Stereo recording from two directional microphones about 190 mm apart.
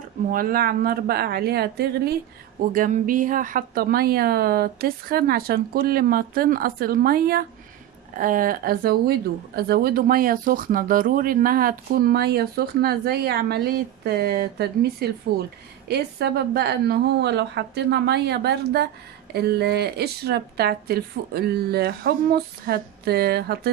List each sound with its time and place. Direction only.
0.3 s speech: 50° right (ahead or behind)
2.7 s a woman's voice: 45° right (ahead or behind)